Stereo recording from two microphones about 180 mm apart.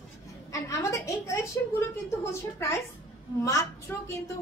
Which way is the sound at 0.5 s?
20° left (ahead or behind).